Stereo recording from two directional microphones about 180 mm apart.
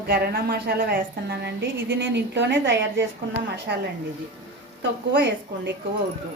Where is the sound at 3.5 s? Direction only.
70° right (ahead or behind).